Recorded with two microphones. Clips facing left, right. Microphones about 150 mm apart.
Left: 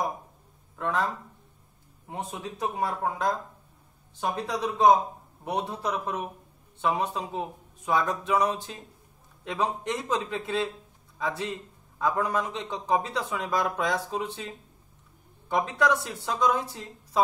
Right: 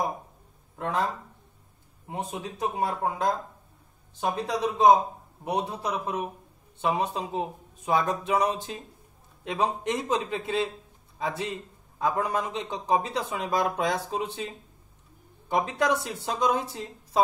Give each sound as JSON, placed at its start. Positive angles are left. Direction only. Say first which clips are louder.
{"t": 0.7, "sound": "speech", "louder": "even", "side_deg": -20}
{"t": 2.0, "sound": "a man's voice", "louder": "right 2 dB", "side_deg": -15}
{"t": 15.5, "sound": "a man's voice", "louder": "even", "side_deg": -20}